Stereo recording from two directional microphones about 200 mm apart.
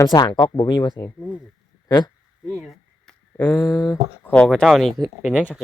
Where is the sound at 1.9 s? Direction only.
20° left (ahead or behind).